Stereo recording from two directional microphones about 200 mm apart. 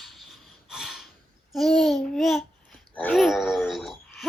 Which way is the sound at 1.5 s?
Centre (ahead or behind).